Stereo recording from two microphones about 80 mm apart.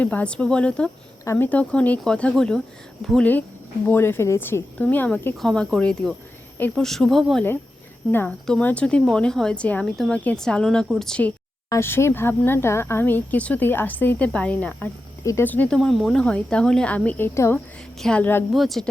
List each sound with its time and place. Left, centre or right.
0.0 s a woman's voice: centre
3.8 s a woman's voice: left
4.8 s a woman's voice: centre
9.8 s speech: centre
10.1 s a woman's voice: centre
10.3 s a woman's voice: centre
11.8 s a woman's voice: left
15.2 s speech: left
15.4 s a woman's voice: left
15.7 s speech: centre
16.2 s a woman's voice: centre; by 18.4 s left
18.5 s speech: centre